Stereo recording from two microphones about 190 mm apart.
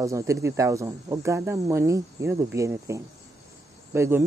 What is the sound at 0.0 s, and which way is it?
Speech, 15° right (ahead or behind).